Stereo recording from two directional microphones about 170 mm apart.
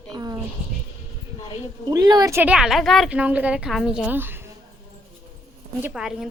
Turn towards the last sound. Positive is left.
turn(degrees=-5)  # may be behind; listen again after turning